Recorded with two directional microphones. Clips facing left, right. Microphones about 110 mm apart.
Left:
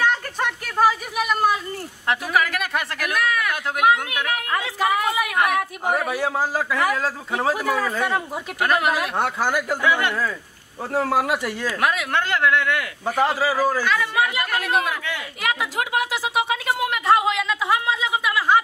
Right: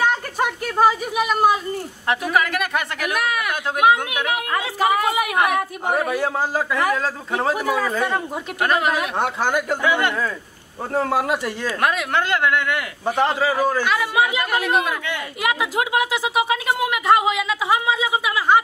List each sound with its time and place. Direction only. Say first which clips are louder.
0.0 s a sound: right 2 dB; 10° right (ahead or behind)
2.0 s a woman's voice: right 1 dB; centre (ahead or behind)
13.8 s a woman's voice: right 2 dB; 10° right (ahead or behind)